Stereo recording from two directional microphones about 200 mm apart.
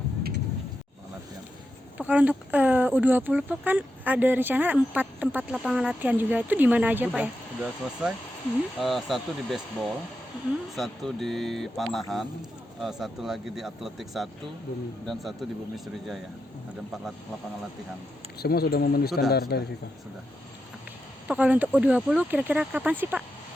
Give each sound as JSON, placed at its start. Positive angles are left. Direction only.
{"t": 2.0, "sound": "speech", "side_deg": -5}
{"t": 18.3, "sound": "speech", "side_deg": 50}
{"t": 21.2, "sound": "speech", "side_deg": -5}